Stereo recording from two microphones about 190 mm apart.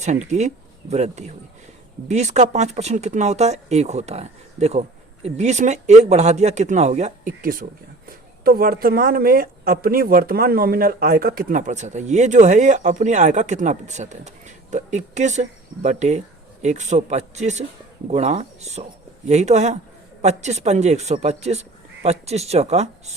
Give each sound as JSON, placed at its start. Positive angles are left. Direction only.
{"t": 0.0, "sound": "speech", "side_deg": -40}